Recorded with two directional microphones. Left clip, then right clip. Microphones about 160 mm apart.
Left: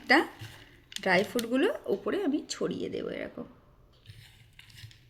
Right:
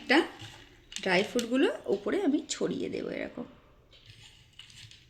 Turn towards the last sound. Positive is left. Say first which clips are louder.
# even
turn(degrees=5)  # may be behind; listen again after turning